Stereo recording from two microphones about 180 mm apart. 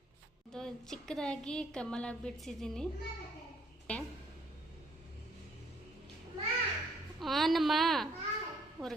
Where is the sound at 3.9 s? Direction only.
5° left (ahead or behind).